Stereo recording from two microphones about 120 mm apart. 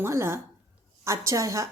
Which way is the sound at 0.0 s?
20° right (ahead or behind).